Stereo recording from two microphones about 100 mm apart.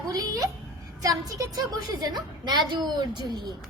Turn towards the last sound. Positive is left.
turn(degrees=-45)  # may be behind; listen again after turning